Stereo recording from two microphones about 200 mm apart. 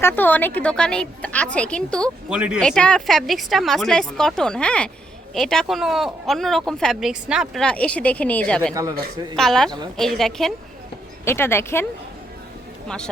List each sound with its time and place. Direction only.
0.0 s a woman's voice: 10° left (ahead or behind)
8.7 s speech: 15° right (ahead or behind)
9.3 s speech: centre (ahead or behind)
11.3 s a woman's voice: 10° left (ahead or behind)